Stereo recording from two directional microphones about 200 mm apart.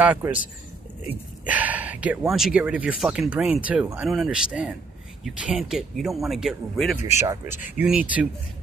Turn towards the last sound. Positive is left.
turn(degrees=-5)  # may be behind; listen again after turning